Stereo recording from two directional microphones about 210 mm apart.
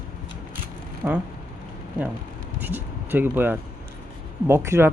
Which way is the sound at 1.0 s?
5° right (ahead or behind).